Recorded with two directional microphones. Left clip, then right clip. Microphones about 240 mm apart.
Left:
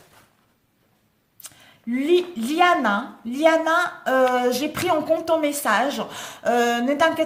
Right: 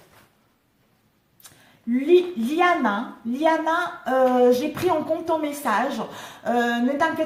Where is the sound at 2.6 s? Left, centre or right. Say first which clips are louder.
Left 2 dB; left.